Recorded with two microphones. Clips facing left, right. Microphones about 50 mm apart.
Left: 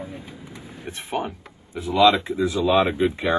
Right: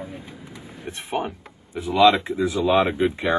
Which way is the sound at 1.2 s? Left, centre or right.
Right.